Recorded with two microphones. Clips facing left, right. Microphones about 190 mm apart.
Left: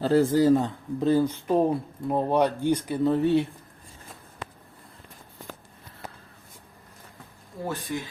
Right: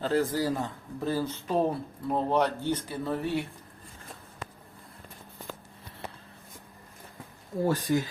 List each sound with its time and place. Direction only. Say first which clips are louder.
0.0 s speech: left 7 dB; 30° left (ahead or behind)
7.7 s speech: right 5 dB; 40° right (ahead or behind)